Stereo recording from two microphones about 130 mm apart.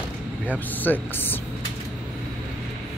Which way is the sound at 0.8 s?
15° left (ahead or behind).